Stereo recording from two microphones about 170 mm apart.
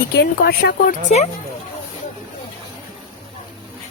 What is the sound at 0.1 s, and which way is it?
Speech, 75° left (ahead or behind).